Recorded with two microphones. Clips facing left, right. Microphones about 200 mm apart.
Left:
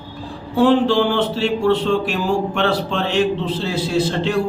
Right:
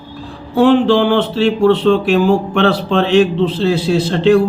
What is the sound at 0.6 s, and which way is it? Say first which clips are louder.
A man's voice: right 4 dB; 65° right (ahead or behind).